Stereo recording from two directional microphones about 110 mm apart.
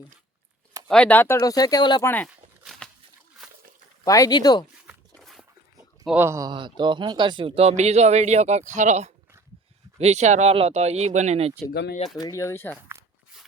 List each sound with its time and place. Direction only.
0.9 s speech: 10° left (ahead or behind)
1.4 s speech: 35° left (ahead or behind)
2.0 s speech: 20° left (ahead or behind)
2.2 s walk: 5° left (ahead or behind)
3.4 s a sound: 5° right (ahead or behind)
4.0 s speech: 30° left (ahead or behind)
5.2 s a sound: centre (ahead or behind)
6.1 s speech: 25° right (ahead or behind)
6.5 s speech: 45° right (ahead or behind); by 11.5 s 80° right
12.2 s speech: 30° left (ahead or behind)